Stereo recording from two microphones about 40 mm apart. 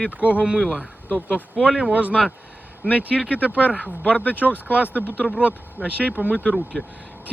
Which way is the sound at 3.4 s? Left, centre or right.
Right.